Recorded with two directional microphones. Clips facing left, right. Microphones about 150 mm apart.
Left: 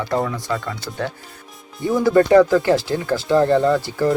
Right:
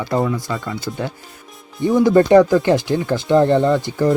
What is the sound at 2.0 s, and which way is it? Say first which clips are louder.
Speech: right 1 dB; 20° right (ahead or behind).